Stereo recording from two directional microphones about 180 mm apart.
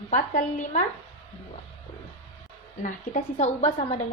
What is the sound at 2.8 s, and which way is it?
A woman's voice, 45° left (ahead or behind).